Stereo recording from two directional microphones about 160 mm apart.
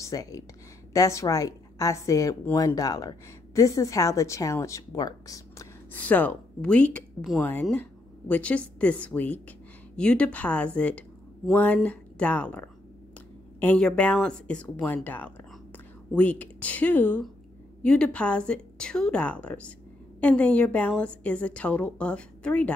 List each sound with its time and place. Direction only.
0.0 s a woman's voice: 20° left (ahead or behind)
5.9 s a woman's voice: 10° left (ahead or behind)